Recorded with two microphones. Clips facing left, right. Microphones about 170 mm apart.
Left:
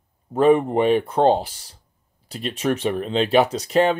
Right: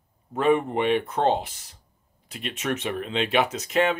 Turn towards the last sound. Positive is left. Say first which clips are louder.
# left 5 dB
turn(degrees=35)  # may be behind; listen again after turning